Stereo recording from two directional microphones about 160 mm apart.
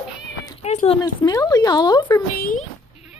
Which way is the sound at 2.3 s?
60° left (ahead or behind).